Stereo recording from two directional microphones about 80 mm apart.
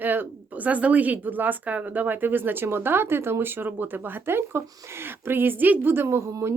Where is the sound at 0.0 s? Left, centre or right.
Right.